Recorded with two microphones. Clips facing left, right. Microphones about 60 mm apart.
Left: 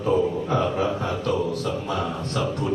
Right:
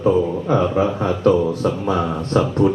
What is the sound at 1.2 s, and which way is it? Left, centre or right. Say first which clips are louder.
Speech: right 10 dB; right.